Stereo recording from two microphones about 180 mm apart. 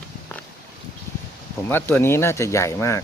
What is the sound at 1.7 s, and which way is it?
Speech, 10° left (ahead or behind).